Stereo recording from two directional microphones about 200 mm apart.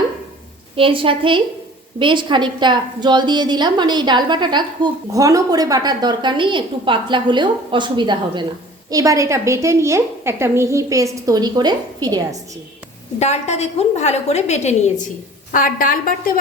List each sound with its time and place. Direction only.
0.8 s a woman's voice: 25° right (ahead or behind)
13.1 s a woman's voice: 35° left (ahead or behind)